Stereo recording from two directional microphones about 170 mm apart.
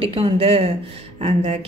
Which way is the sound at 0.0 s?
35° right (ahead or behind).